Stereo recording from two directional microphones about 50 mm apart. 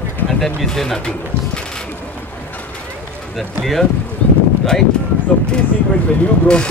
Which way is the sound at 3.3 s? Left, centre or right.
Centre.